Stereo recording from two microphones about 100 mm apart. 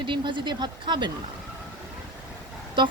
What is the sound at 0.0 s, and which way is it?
Speech, 55° right (ahead or behind).